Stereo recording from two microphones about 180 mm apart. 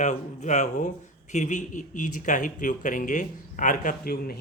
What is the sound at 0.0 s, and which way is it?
Speech, 40° left (ahead or behind).